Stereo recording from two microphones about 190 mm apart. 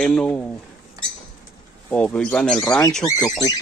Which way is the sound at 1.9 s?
5° left (ahead or behind).